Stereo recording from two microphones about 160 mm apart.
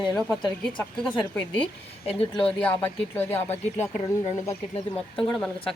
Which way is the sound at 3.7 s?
45° left (ahead or behind).